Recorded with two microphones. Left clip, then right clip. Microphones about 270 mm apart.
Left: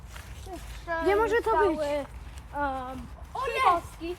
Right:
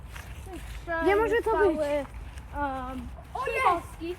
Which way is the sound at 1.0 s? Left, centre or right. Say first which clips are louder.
Even; centre.